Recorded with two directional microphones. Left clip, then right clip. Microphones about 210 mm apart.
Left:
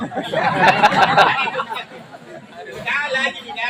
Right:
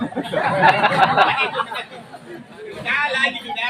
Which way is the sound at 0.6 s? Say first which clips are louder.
Left 1 dB; 45° left (ahead or behind).